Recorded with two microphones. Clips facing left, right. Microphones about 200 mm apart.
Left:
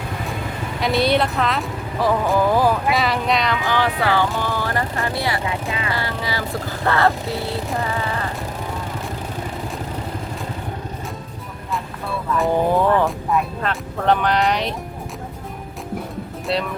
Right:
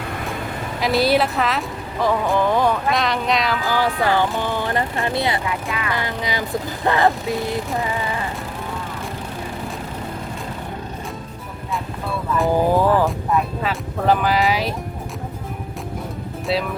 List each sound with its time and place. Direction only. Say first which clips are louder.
0.8 s speech: right 1 dB; centre (ahead or behind)
3.7 s speech: right 1 dB; 10° right (ahead or behind)
5.5 s vehicle: even; 25° left (ahead or behind)
5.9 s speech: right 1 dB; 20° right (ahead or behind)
6.8 s music: right 1 dB; 15° right (ahead or behind)
12.4 s speech: right 1 dB; 5° right (ahead or behind)